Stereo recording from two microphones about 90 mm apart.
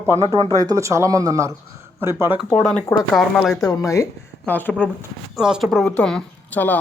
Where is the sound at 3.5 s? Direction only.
40° left (ahead or behind).